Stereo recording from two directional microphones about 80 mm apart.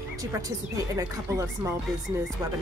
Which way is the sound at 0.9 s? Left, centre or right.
Right.